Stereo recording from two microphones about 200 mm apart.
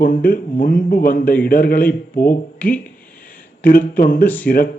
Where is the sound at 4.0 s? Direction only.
45° left (ahead or behind).